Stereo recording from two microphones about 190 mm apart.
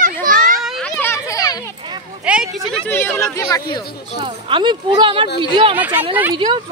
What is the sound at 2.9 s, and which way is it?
Speech, 10° left (ahead or behind).